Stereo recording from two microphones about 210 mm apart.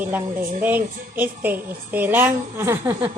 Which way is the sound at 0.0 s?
10° right (ahead or behind).